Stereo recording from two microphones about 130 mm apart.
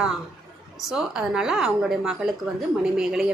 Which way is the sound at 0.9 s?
5° right (ahead or behind).